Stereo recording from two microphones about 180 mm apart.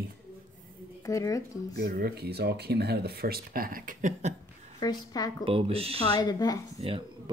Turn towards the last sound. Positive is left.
turn(degrees=-30)  # may be behind; listen again after turning